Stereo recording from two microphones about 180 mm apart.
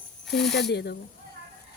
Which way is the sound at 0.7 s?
65° left (ahead or behind).